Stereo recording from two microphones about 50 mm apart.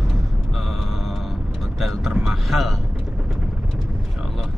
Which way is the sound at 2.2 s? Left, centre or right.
Centre.